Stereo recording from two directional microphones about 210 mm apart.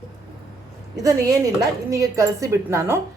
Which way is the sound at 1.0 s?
15° right (ahead or behind).